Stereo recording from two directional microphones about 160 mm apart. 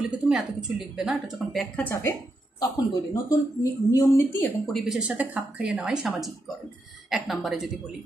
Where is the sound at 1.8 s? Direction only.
15° left (ahead or behind).